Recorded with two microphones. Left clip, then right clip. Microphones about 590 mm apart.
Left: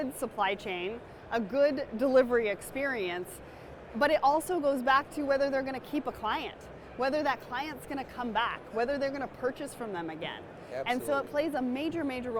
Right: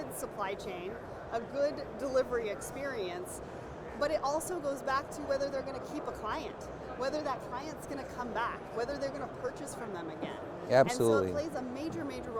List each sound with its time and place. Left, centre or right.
0.2 s a woman's voice: left
4.4 s speech: left
4.9 s a woman's voice: left
10.7 s speech: right
11.1 s speech: left